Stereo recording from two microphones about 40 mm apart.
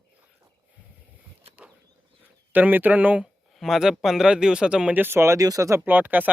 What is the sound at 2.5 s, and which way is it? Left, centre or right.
Speech, right.